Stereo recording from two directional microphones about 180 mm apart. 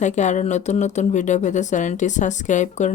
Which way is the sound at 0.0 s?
40° left (ahead or behind).